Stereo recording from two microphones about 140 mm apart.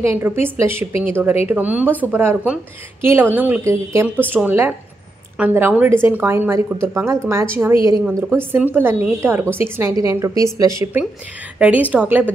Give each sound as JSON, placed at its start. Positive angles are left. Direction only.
{"t": 0.0, "sound": "a woman's voice", "side_deg": -15}
{"t": 11.5, "sound": "a woman's voice", "side_deg": -10}